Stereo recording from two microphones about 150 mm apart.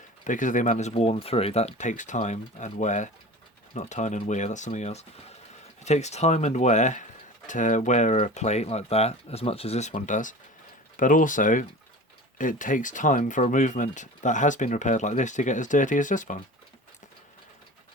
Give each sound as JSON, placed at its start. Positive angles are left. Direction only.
{"t": 0.3, "sound": "speech", "side_deg": 60}